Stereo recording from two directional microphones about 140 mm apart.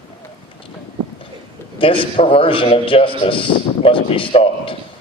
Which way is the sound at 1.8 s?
40° left (ahead or behind).